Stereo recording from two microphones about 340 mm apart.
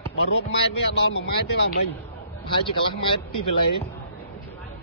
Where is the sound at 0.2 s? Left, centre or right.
Left.